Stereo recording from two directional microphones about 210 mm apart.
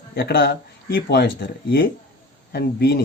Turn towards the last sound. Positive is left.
turn(degrees=50)  # may be behind; listen again after turning